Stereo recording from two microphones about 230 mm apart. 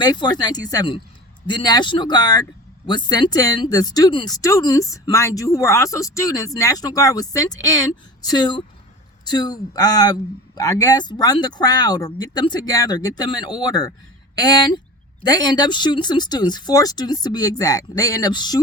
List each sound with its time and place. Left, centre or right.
0.0 s speech: centre